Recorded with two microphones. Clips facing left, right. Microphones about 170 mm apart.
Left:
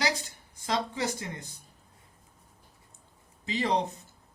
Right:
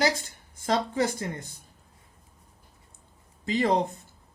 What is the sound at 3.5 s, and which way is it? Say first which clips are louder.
Speech: right 5 dB; 50° right (ahead or behind).